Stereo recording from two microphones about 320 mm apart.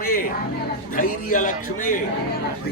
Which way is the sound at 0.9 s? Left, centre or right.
Left.